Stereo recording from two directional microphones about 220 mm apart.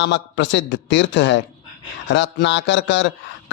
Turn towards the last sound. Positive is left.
turn(degrees=55)  # may be behind; listen again after turning